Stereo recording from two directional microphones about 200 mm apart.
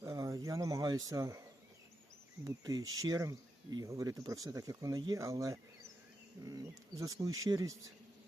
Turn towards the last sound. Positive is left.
turn(degrees=-15)  # may be behind; listen again after turning